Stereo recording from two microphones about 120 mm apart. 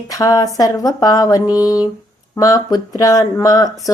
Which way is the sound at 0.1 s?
30° left (ahead or behind).